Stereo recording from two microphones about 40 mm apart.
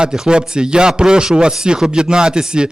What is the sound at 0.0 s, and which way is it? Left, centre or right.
A man's voice, right.